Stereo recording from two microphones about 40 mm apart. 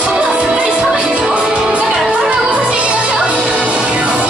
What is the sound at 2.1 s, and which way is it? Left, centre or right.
Music, right.